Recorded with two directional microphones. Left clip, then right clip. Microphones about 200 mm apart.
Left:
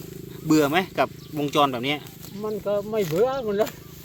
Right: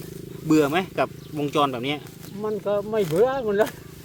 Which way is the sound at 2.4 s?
10° right (ahead or behind).